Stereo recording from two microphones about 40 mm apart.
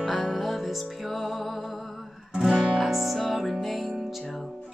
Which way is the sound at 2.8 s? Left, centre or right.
Centre.